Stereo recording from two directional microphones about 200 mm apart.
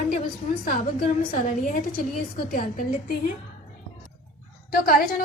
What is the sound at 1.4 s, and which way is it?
Speech, 45° left (ahead or behind).